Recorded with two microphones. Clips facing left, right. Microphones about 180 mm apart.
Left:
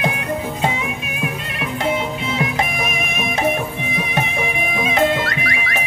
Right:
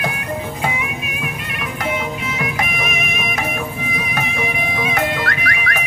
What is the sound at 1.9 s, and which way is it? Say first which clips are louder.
Music: left 2 dB; 30° left (ahead or behind).